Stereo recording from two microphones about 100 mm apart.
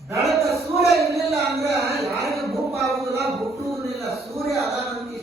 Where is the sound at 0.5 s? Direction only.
30° right (ahead or behind).